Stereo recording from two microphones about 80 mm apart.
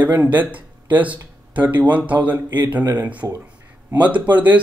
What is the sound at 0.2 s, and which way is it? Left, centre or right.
Speech, right.